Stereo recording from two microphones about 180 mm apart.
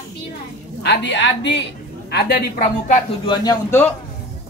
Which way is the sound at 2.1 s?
65° left (ahead or behind).